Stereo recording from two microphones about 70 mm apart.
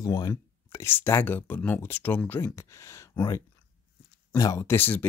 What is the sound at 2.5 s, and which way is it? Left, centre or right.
Speech, left.